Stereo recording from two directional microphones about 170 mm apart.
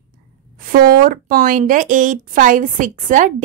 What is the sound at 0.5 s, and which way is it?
A woman's voice, 60° right (ahead or behind).